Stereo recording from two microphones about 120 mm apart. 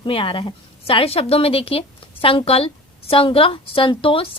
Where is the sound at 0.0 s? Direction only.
50° left (ahead or behind).